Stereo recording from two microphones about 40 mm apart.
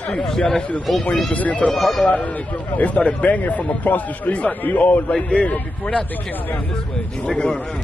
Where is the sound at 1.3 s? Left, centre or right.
Left.